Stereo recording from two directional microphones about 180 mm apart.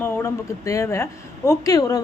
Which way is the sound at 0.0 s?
15° left (ahead or behind).